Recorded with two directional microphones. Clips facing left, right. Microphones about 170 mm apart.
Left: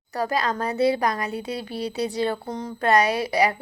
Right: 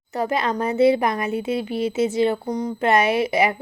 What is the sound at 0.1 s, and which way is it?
Speech, 20° right (ahead or behind).